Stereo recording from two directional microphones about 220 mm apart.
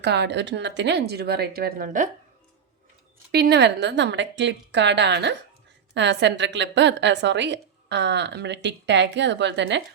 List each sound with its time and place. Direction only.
0.0 s a woman's voice: 50° right (ahead or behind)
3.3 s a woman's voice: 50° right (ahead or behind)